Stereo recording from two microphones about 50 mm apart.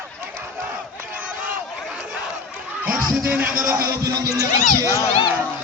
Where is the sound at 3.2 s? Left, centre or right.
Right.